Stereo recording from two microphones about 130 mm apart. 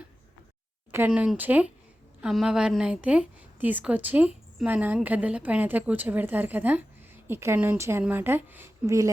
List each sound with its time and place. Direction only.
0.9 s a woman's voice: 15° right (ahead or behind)